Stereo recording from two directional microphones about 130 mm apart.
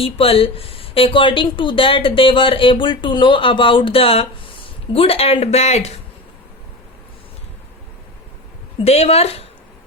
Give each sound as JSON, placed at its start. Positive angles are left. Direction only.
{"t": 0.0, "sound": "speech", "side_deg": 45}
{"t": 8.8, "sound": "speech", "side_deg": 55}